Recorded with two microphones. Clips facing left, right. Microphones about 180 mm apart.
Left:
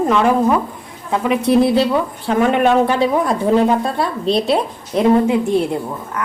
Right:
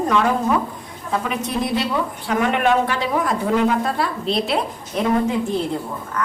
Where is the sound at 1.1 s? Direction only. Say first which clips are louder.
Left 9 dB; 30° left (ahead or behind).